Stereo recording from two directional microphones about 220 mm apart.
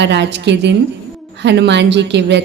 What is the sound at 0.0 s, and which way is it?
A woman's voice, 50° right (ahead or behind).